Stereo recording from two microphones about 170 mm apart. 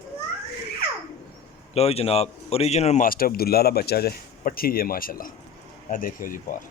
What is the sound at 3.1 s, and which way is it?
Speech, 60° left (ahead or behind).